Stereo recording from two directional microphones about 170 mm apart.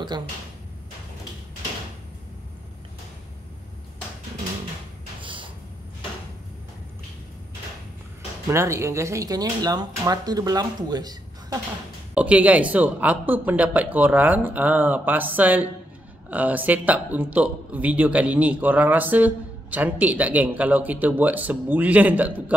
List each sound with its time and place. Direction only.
5.2 s a sound: 30° right (ahead or behind)
8.5 s speech: 15° right (ahead or behind)
12.1 s a man's voice: 10° right (ahead or behind)